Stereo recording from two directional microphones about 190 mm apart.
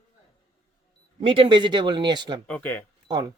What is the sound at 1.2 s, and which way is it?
Speech, 25° right (ahead or behind).